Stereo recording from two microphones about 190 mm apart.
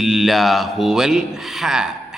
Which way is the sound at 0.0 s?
Centre (ahead or behind).